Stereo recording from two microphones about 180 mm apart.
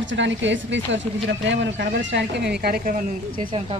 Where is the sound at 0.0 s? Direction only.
90° right; by 2.5 s 70° right (ahead or behind).